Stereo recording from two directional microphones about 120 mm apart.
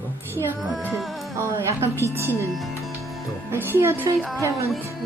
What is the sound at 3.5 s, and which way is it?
Speech, 20° right (ahead or behind).